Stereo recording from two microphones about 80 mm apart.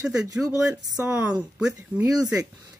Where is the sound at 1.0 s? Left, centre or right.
Centre.